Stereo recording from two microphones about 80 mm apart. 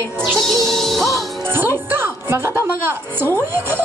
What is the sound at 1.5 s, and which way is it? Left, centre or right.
A woman's voice, right.